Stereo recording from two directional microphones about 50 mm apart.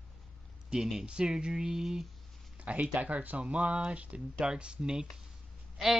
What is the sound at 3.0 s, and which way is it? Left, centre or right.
Speech, right.